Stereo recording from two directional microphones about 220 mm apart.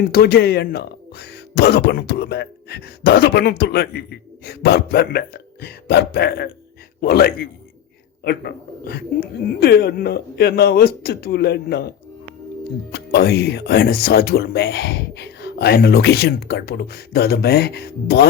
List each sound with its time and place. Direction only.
0.1 s speech: 45° left (ahead or behind)
12.9 s speech: 45° left (ahead or behind)